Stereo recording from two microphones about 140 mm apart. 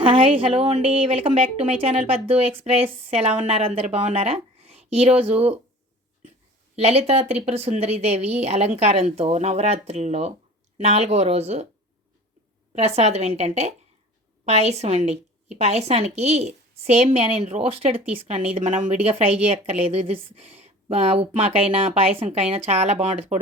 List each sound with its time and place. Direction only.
0.0 s a woman's voice: 40° right (ahead or behind)
6.7 s a woman's voice: 50° right (ahead or behind)
12.7 s a woman's voice: 50° right (ahead or behind)
19.0 s a woman's voice: 45° right (ahead or behind)
23.3 s speech: 55° right (ahead or behind)